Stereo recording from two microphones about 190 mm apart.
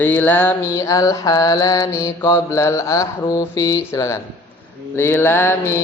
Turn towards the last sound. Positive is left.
turn(degrees=10)  # may be behind; listen again after turning